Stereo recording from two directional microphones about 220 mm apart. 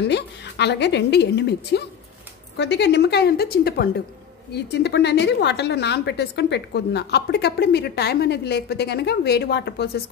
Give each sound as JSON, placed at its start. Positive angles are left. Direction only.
{"t": 0.1, "sound": "a woman's voice", "side_deg": 50}